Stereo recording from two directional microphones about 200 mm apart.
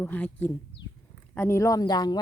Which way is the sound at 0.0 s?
10° left (ahead or behind).